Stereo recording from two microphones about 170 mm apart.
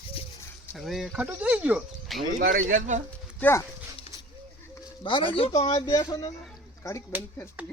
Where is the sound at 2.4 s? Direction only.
55° right (ahead or behind).